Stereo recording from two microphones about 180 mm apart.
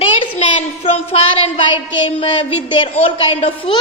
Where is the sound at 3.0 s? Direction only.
30° left (ahead or behind).